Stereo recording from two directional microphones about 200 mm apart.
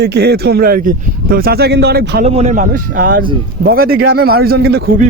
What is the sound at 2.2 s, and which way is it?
Speech, 35° right (ahead or behind).